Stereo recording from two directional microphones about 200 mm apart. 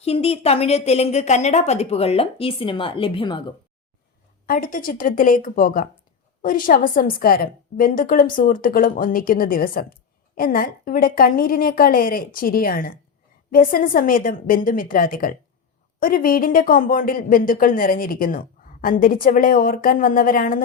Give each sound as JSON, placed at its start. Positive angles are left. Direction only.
{"t": 0.0, "sound": "a woman's voice", "side_deg": 30}
{"t": 4.4, "sound": "speech", "side_deg": 45}